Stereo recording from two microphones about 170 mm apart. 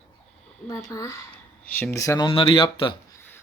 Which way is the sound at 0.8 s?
20° left (ahead or behind).